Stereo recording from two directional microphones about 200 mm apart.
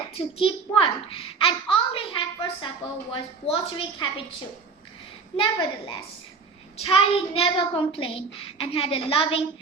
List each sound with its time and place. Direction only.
0.1 s a child's voice: 25° left (ahead or behind)
5.4 s a child's voice: 25° left (ahead or behind)